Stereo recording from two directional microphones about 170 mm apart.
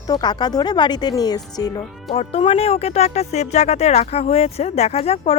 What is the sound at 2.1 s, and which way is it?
Speech, 35° left (ahead or behind).